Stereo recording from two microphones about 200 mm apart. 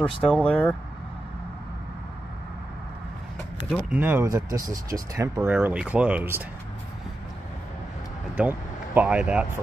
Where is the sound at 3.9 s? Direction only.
10° right (ahead or behind).